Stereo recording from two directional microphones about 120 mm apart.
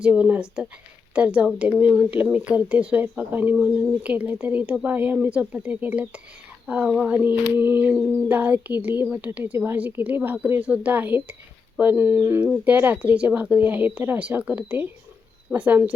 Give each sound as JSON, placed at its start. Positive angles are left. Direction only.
{"t": 0.0, "sound": "speech", "side_deg": -10}
{"t": 7.2, "sound": "speech", "side_deg": -15}